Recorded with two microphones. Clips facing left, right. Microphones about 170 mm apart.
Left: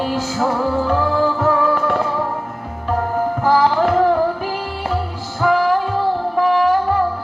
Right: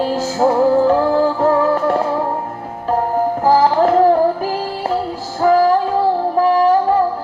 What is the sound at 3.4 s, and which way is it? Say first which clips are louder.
Music: right 3 dB; 40° right (ahead or behind).